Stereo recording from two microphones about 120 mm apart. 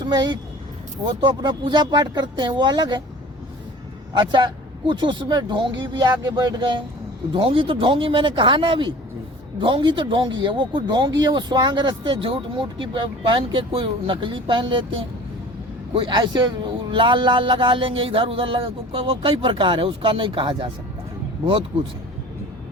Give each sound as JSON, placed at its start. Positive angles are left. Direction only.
{"t": 0.0, "sound": "speech", "side_deg": -35}
{"t": 4.2, "sound": "speech", "side_deg": -40}